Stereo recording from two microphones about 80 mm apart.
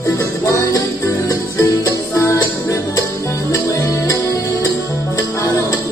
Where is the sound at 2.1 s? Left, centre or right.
Left.